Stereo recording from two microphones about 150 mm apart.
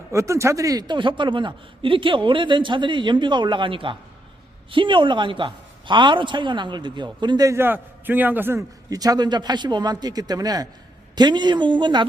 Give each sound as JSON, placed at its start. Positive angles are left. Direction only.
{"t": 0.1, "sound": "a man's voice", "side_deg": -20}